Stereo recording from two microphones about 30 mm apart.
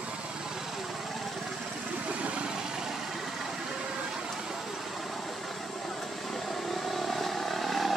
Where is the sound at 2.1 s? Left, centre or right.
Right.